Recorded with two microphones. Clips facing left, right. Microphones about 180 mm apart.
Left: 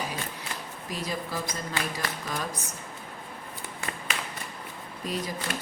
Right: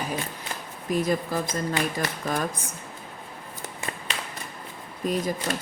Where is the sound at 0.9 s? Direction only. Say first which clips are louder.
Right 8 dB; 50° right (ahead or behind).